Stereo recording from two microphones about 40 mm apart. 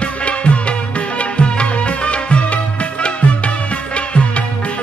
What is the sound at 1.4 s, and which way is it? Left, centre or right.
Music, left.